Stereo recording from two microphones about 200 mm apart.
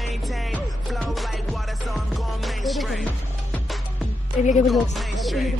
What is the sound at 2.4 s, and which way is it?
Music, centre (ahead or behind).